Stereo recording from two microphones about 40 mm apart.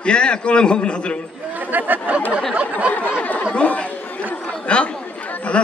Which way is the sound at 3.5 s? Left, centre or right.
Left.